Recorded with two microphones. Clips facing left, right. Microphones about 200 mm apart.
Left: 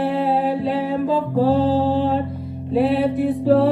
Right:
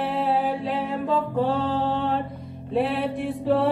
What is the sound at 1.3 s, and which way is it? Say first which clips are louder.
Music: left 7 dB; 35° left (ahead or behind).